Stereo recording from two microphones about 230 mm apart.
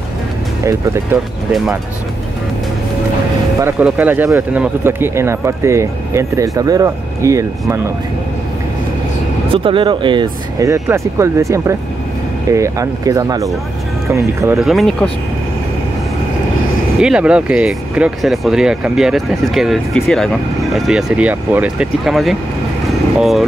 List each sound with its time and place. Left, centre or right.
1.1 s speech: centre
3.6 s speech: centre
9.5 s speech: right
14.6 s speech: centre
17.0 s speech: centre